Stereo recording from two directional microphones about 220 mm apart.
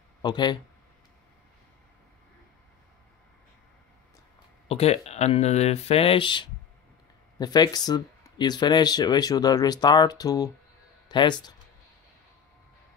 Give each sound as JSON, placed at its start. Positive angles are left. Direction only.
{"t": 0.2, "sound": "speech", "side_deg": 20}
{"t": 4.6, "sound": "speech", "side_deg": 30}